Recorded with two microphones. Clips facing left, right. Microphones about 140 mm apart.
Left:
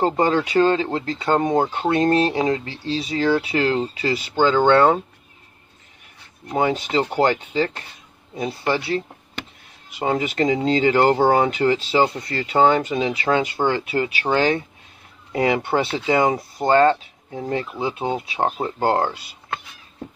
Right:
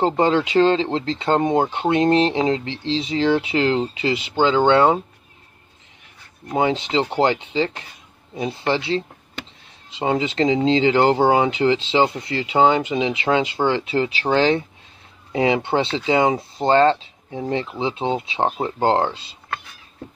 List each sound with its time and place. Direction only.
0.0 s speech: 20° right (ahead or behind)
6.5 s speech: 20° right (ahead or behind)